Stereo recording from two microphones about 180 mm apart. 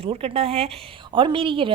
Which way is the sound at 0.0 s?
30° right (ahead or behind).